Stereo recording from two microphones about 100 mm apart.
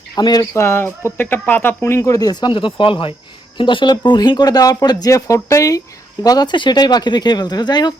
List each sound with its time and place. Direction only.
0.2 s speech: 45° left (ahead or behind)
0.5 s speech: 25° left (ahead or behind)
2.0 s speech: 35° left (ahead or behind)
2.5 s speech: 60° left (ahead or behind)